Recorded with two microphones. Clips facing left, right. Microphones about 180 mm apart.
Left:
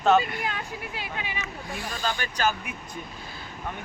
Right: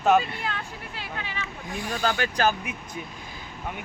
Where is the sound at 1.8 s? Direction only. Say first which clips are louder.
Right 5 dB; 45° right (ahead or behind).